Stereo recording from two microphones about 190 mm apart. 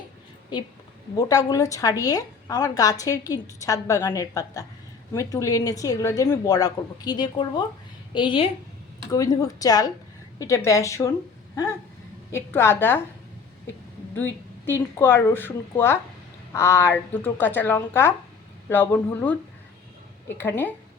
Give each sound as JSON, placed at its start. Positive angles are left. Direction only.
{"t": 0.5, "sound": "a woman's voice", "side_deg": 25}
{"t": 12.3, "sound": "a woman's voice", "side_deg": 15}
{"t": 14.2, "sound": "a woman's voice", "side_deg": 10}